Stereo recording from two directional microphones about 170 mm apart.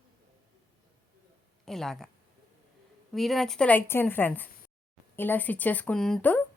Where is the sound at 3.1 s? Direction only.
Centre (ahead or behind).